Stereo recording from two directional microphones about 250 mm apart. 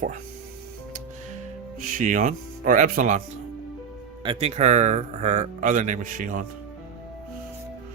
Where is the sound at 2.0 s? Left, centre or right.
Right.